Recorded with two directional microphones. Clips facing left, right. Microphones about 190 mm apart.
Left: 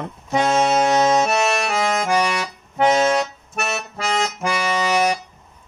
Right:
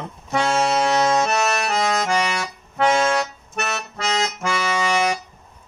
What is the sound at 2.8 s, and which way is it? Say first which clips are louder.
Music: left 2 dB; 20° left (ahead or behind).